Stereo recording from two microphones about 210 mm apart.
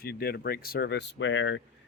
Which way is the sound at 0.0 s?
45° left (ahead or behind).